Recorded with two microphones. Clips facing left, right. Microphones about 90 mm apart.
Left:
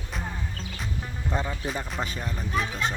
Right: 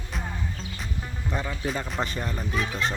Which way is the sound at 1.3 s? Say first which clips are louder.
Left 1 dB; 25° left (ahead or behind).